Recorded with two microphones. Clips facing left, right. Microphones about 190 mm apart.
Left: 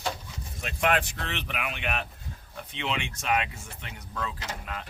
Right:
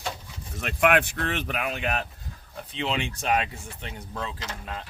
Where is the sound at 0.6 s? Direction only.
60° right (ahead or behind); by 4.8 s 30° right (ahead or behind).